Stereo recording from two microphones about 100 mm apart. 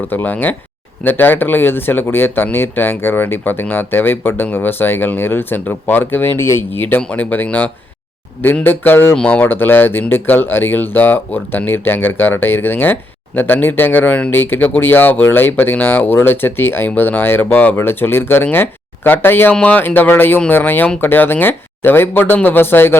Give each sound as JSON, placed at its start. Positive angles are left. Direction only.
{"t": 0.1, "sound": "speech", "side_deg": 20}